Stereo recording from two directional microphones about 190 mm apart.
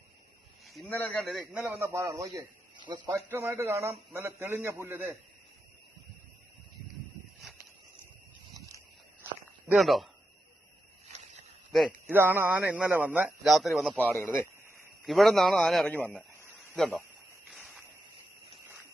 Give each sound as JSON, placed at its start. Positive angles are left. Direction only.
{"t": 0.6, "sound": "a man's voice", "side_deg": 0}
{"t": 1.6, "sound": "a man's voice", "side_deg": -15}
{"t": 9.6, "sound": "a man's voice", "side_deg": 0}
{"t": 11.7, "sound": "speech", "side_deg": 0}
{"t": 12.1, "sound": "a man's voice", "side_deg": -10}
{"t": 14.0, "sound": "speech", "side_deg": 10}
{"t": 15.0, "sound": "a man's voice", "side_deg": 0}
{"t": 16.6, "sound": "a sound", "side_deg": 0}